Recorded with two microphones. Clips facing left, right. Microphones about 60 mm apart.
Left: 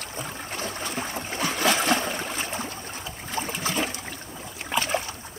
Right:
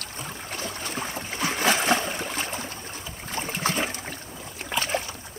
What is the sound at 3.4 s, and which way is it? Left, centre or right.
Boat, right.